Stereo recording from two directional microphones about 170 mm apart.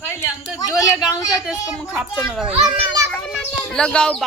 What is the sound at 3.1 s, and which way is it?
Bird, 5° left (ahead or behind).